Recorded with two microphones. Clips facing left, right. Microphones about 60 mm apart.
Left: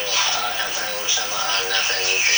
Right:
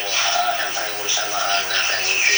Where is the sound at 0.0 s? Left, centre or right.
Right.